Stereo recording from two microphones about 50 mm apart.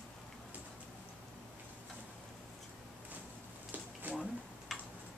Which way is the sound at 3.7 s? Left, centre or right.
Right.